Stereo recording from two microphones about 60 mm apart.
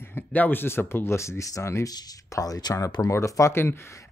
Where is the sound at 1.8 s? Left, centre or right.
Left.